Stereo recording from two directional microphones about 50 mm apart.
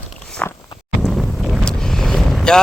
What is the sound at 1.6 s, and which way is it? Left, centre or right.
Vehicle, centre.